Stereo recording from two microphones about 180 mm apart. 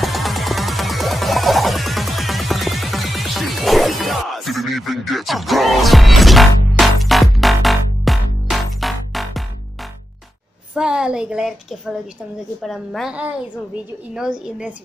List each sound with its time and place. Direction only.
0.0 s music: centre (ahead or behind)
10.7 s a sound: 5° right (ahead or behind)
12.6 s a woman's voice: centre (ahead or behind)